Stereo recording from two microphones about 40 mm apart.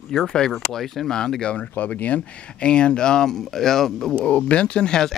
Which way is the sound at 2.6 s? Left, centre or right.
Left.